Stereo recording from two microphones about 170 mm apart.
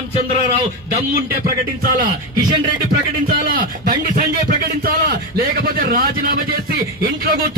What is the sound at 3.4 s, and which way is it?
A man's voice, 60° right (ahead or behind).